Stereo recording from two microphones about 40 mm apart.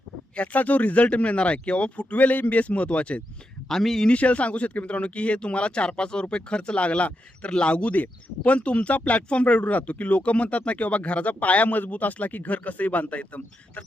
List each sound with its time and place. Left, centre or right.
0.3 s speech: left
3.7 s speech: centre
4.1 s speech: left
7.9 s speech: left